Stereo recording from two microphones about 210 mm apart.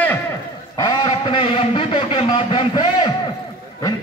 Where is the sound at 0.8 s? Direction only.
20° left (ahead or behind).